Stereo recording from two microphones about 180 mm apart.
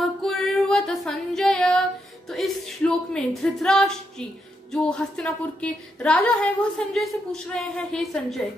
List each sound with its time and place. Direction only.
0.0 s female singing: centre (ahead or behind)
2.2 s a woman's voice: centre (ahead or behind)